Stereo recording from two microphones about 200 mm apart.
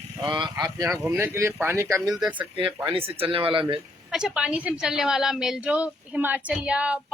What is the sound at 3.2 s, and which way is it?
Speech, 25° right (ahead or behind).